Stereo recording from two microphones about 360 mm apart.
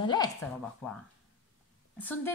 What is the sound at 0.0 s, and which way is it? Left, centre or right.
A woman's voice, centre.